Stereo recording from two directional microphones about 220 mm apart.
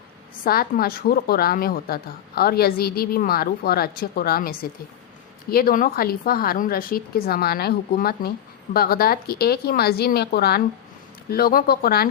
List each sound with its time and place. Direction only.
0.4 s a woman's voice: 45° left (ahead or behind)